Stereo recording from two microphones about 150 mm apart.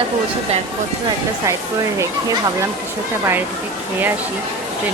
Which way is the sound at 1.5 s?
20° right (ahead or behind).